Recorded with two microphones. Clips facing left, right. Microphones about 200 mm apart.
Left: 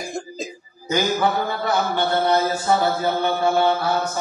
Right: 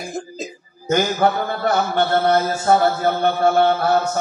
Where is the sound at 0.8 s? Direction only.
55° right (ahead or behind).